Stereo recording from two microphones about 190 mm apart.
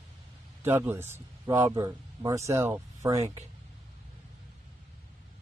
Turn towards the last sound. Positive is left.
turn(degrees=-15)  # may be behind; listen again after turning